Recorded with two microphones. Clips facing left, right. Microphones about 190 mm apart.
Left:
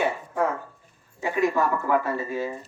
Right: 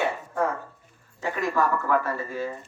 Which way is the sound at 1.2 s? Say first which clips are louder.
Left 2 dB; 15° left (ahead or behind).